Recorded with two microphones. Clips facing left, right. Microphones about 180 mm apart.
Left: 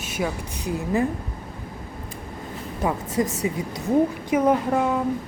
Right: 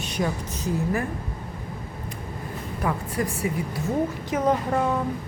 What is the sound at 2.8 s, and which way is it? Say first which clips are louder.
A woman's voice: left 3 dB; 20° left (ahead or behind).